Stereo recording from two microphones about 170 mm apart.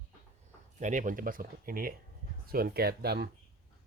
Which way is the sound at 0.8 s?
50° right (ahead or behind).